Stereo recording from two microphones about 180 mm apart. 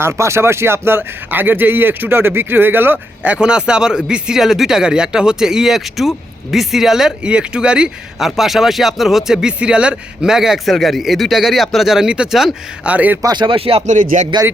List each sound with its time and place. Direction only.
0.0 s speech: 15° right (ahead or behind)
13.2 s speech: 25° right (ahead or behind); by 14.3 s 45° right (ahead or behind)